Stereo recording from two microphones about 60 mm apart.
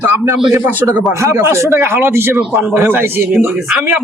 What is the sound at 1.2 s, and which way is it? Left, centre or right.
A man's voice, right.